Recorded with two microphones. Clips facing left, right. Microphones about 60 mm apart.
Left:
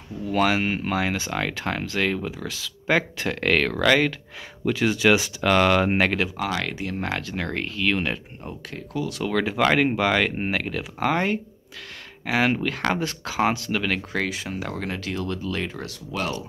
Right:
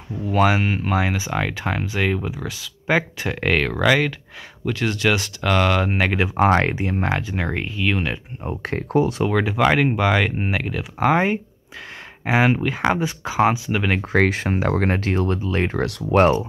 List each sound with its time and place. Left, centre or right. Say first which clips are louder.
0.3 s speech: right 3 dB; centre
4.6 s speech: left 1 dB; centre
6.3 s speech: right 10 dB; right
6.8 s speech: right 5 dB; right; by 8.2 s centre
8.6 s speech: right 10 dB; right
9.4 s speech: right 1 dB; centre; by 14.1 s right
14.1 s speech: right 8 dB; right
15.8 s speech: right 13 dB; right